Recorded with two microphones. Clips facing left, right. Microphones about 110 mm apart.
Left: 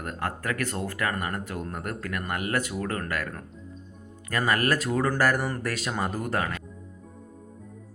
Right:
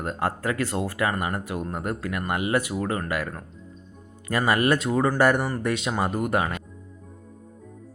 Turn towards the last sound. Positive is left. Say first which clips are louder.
# right 4 dB
turn(degrees=-15)  # may be behind; listen again after turning